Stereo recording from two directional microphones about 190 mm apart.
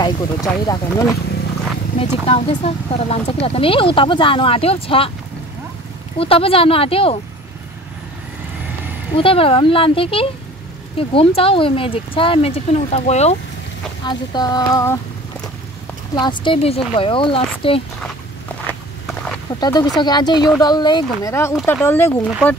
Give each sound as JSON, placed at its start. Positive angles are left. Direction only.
{"t": 0.0, "sound": "speech", "side_deg": 20}
{"t": 2.0, "sound": "speech", "side_deg": 30}
{"t": 6.1, "sound": "speech", "side_deg": 30}
{"t": 9.1, "sound": "speech", "side_deg": 30}
{"t": 14.0, "sound": "speech", "side_deg": 20}
{"t": 16.2, "sound": "speech", "side_deg": 25}
{"t": 19.6, "sound": "speech", "side_deg": 20}